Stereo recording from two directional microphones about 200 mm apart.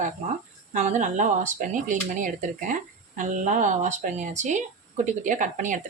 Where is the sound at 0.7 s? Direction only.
35° right (ahead or behind).